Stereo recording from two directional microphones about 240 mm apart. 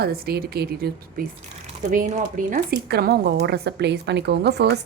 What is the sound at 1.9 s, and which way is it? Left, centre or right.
Speech, right.